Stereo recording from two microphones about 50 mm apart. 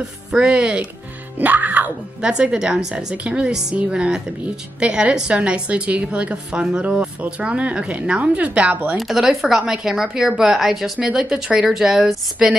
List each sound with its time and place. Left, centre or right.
0.4 s a woman's voice: right
1.4 s music: right
2.2 s a woman's voice: centre
8.9 s a woman's voice: centre
11.0 s a woman's voice: centre